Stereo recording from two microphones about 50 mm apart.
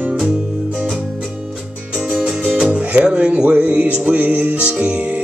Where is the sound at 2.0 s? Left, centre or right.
Centre.